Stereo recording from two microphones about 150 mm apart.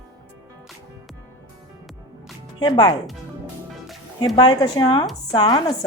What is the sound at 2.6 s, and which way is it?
Speech, 25° left (ahead or behind).